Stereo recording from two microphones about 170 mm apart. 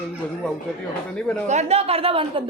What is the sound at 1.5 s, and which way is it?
Speech, 40° right (ahead or behind).